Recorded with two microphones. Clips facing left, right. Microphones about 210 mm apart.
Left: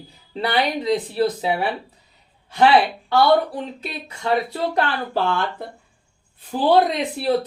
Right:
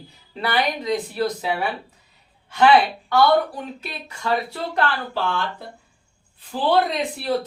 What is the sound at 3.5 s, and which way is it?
Speech, 25° left (ahead or behind).